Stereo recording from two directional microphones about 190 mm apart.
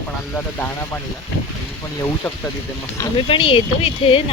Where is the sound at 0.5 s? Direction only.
10° left (ahead or behind).